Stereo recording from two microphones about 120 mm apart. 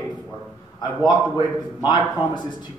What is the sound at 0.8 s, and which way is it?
A man's voice, 35° left (ahead or behind).